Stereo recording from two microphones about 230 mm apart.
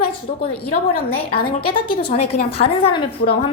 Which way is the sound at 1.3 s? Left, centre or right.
Left.